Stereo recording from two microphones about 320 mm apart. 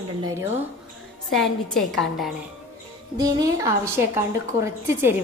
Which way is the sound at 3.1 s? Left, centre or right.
Centre.